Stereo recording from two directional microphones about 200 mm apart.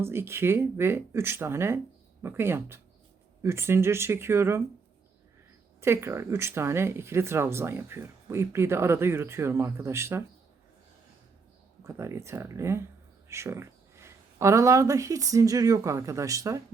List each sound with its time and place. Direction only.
0.0 s speech: 10° right (ahead or behind)
5.8 s speech: 15° right (ahead or behind)
11.8 s speech: 15° right (ahead or behind)